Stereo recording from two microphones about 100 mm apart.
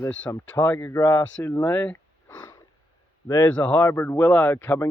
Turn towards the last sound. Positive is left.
turn(degrees=25)  # may be behind; listen again after turning